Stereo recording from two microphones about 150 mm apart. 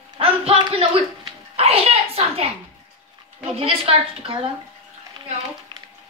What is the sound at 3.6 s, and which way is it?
Speech, 35° right (ahead or behind).